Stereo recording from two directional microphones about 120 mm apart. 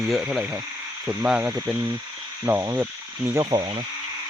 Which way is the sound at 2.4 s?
20° right (ahead or behind).